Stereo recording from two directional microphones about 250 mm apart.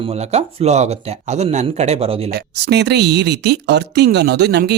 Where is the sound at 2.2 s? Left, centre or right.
Right.